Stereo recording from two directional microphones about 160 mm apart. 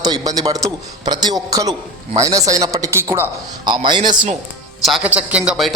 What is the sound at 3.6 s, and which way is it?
Speech, 30° right (ahead or behind).